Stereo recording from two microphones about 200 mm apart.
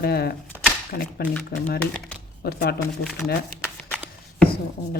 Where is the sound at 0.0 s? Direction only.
50° left (ahead or behind).